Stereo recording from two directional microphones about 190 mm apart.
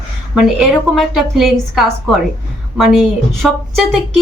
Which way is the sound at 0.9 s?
Centre (ahead or behind).